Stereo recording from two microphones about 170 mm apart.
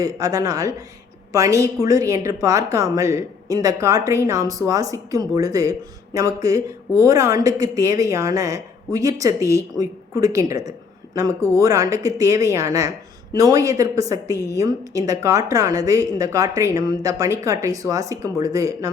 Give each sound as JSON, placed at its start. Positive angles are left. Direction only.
{"t": 0.0, "sound": "a woman's voice", "side_deg": -20}